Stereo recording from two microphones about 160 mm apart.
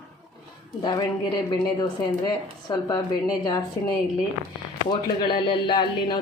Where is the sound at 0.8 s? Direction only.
25° left (ahead or behind).